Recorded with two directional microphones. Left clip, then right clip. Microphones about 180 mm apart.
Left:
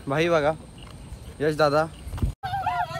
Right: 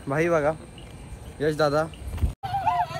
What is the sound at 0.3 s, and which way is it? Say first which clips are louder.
Speech: left 1 dB; 5° left (ahead or behind).